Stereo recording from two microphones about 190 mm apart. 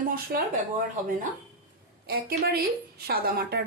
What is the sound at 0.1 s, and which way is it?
Speech, 50° right (ahead or behind).